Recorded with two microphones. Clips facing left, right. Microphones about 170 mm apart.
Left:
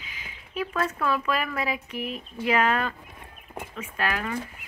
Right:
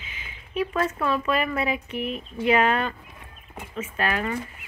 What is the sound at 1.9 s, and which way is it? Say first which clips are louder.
Speech: right 3 dB; 10° left (ahead or behind).